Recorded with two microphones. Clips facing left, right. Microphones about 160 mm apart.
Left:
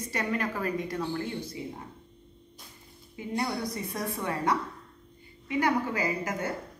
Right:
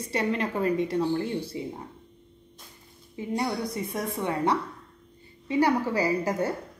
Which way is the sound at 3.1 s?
25° right (ahead or behind).